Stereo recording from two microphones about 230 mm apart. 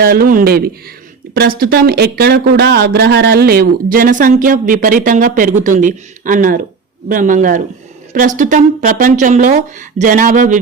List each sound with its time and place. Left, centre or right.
0.0 s speech: right